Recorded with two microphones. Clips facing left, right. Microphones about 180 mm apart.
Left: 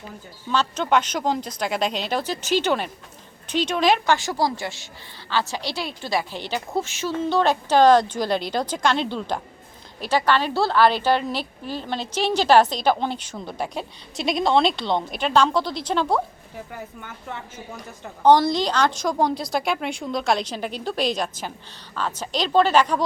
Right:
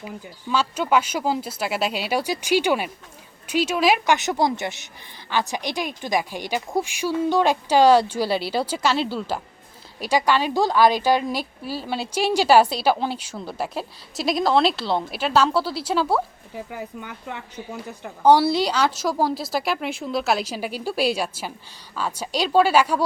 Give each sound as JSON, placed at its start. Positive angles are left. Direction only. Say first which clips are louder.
{"t": 0.5, "sound": "a woman's voice", "louder": "even", "side_deg": -10}